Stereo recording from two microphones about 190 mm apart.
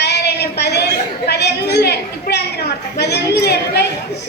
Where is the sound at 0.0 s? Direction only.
60° left (ahead or behind).